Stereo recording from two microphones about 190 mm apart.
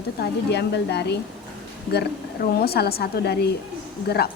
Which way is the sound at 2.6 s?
55° left (ahead or behind).